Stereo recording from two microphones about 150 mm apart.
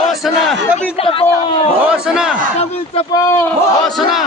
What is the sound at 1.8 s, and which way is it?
Speech, 5° right (ahead or behind).